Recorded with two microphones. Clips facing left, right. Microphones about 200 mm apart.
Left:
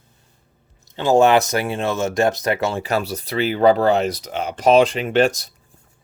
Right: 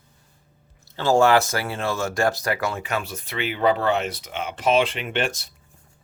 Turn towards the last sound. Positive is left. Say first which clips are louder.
# left 9 dB
turn(degrees=40)  # may be behind; listen again after turning